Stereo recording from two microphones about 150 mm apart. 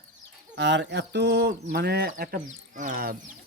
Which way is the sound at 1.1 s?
90° right.